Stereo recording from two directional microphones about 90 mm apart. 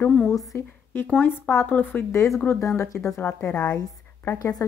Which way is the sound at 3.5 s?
10° left (ahead or behind).